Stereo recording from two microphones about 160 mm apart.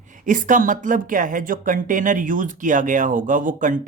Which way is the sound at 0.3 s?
55° right (ahead or behind).